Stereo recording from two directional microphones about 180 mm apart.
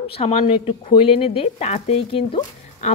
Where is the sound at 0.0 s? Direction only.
35° left (ahead or behind).